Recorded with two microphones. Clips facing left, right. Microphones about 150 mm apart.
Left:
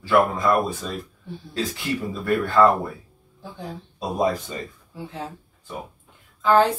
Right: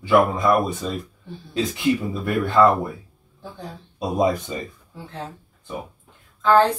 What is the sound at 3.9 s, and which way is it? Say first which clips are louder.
Speech: right 2 dB; 20° right (ahead or behind).